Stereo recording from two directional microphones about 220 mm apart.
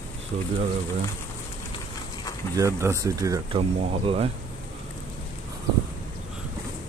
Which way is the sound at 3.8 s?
25° right (ahead or behind).